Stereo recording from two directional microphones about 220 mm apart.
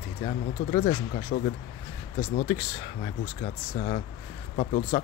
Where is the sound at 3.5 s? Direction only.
30° left (ahead or behind).